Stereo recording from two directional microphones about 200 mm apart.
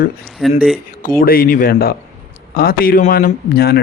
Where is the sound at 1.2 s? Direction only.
45° left (ahead or behind).